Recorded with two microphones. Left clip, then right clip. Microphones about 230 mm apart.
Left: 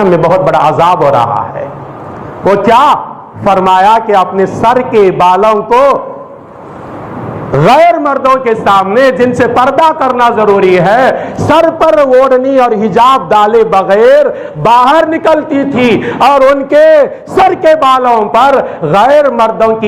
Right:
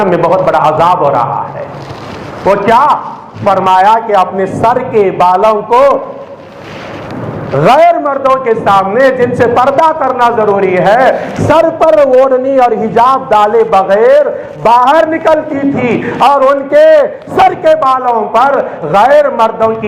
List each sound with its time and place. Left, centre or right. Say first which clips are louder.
0.0 s a man's voice: left 1 dB; left
2.4 s a man's voice: left 1 dB; left
7.5 s a man's voice: left 1 dB; left